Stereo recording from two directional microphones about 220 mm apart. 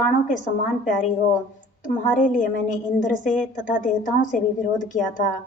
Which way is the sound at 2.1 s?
35° left (ahead or behind).